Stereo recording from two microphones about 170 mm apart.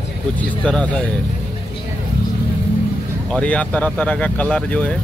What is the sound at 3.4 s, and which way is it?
Speech, 10° left (ahead or behind).